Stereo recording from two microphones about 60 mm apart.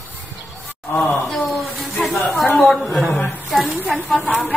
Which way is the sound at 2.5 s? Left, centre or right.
Centre.